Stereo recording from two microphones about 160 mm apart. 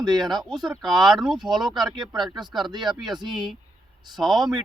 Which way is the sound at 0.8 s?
Centre (ahead or behind).